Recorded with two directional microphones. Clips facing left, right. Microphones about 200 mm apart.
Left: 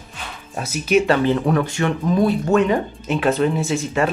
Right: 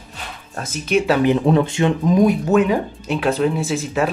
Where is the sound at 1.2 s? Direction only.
15° right (ahead or behind).